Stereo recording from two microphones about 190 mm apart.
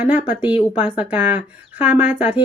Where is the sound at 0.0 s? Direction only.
5° right (ahead or behind).